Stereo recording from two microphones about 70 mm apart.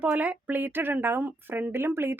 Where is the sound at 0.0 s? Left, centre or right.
Right.